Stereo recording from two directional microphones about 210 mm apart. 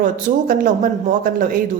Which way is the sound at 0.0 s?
40° right (ahead or behind).